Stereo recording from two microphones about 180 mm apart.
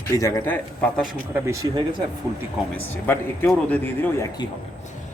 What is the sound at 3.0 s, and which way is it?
A man's voice, 10° left (ahead or behind).